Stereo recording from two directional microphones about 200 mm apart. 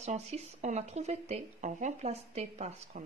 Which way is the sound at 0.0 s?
35° right (ahead or behind).